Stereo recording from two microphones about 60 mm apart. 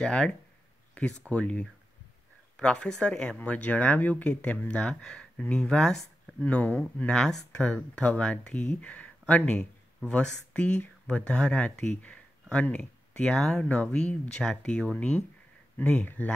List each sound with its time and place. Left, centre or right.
0.0 s speech: centre
1.3 s speech: centre
6.4 s speech: left